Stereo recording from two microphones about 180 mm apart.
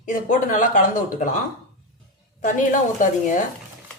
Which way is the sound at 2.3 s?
45° left (ahead or behind).